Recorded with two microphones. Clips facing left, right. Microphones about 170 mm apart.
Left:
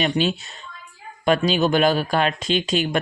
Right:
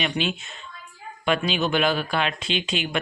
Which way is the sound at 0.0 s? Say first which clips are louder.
Left 5 dB; 40° left (ahead or behind).